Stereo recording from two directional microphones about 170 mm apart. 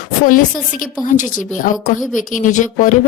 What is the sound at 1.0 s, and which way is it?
Speech, 50° left (ahead or behind).